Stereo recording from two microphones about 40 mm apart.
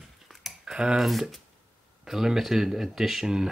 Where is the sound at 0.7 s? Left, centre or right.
Centre.